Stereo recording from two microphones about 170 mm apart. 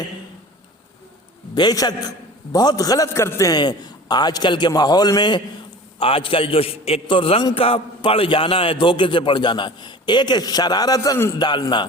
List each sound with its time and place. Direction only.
1.5 s a man's voice: 25° left (ahead or behind)